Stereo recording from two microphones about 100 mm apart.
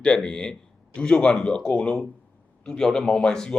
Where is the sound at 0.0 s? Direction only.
10° left (ahead or behind).